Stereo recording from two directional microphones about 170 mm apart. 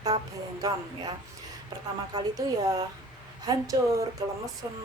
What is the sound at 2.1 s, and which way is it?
Speech, 25° right (ahead or behind).